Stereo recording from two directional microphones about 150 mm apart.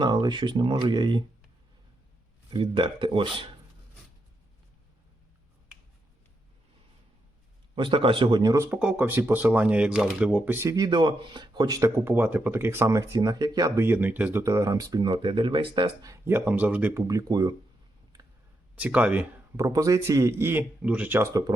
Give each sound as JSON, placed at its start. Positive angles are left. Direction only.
{"t": 0.0, "sound": "speech", "side_deg": -30}
{"t": 2.5, "sound": "speech", "side_deg": -30}
{"t": 7.8, "sound": "speech", "side_deg": -35}
{"t": 10.8, "sound": "speech", "side_deg": -30}
{"t": 14.4, "sound": "speech", "side_deg": -20}
{"t": 16.0, "sound": "speech", "side_deg": -15}
{"t": 17.1, "sound": "speech", "side_deg": -25}
{"t": 18.8, "sound": "speech", "side_deg": -10}
{"t": 19.6, "sound": "speech", "side_deg": -20}